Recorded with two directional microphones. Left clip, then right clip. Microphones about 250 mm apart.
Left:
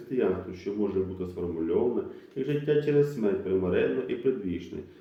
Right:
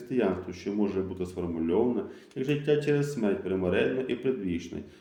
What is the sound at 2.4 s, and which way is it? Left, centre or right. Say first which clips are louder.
A man's voice: even; right.